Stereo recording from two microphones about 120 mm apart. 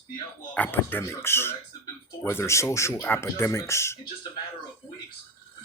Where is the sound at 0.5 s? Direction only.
15° left (ahead or behind).